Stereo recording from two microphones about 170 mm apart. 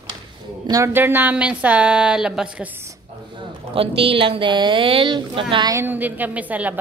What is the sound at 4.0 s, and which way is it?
A woman's voice, 30° right (ahead or behind).